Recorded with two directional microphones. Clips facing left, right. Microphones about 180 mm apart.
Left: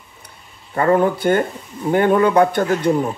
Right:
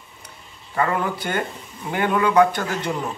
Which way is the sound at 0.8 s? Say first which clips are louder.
Left 7 dB; 40° left (ahead or behind).